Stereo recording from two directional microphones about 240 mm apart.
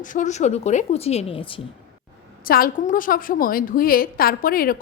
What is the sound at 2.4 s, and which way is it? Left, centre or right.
A woman's voice, left.